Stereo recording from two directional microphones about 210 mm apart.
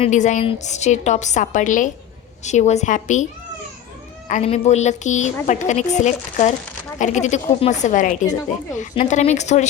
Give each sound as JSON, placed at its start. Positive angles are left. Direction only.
{"t": 0.0, "sound": "speech", "side_deg": 35}
{"t": 4.3, "sound": "speech", "side_deg": 35}